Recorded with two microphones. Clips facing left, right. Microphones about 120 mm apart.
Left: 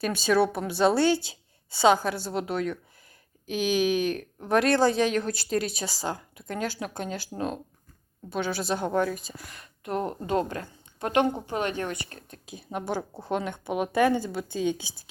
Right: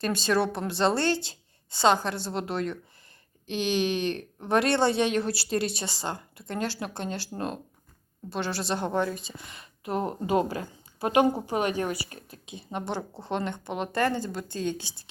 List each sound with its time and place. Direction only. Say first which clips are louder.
0.0 s speech: left 2 dB; 5° left (ahead or behind)
12.5 s a woman's voice: left 1 dB; 5° left (ahead or behind)